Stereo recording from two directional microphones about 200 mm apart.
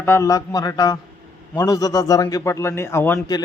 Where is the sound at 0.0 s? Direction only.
15° left (ahead or behind).